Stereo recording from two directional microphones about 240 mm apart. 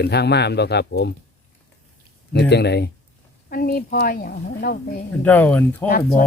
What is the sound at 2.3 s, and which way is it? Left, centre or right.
A man's voice, left.